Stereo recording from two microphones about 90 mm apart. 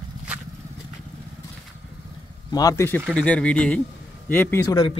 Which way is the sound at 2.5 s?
40° left (ahead or behind).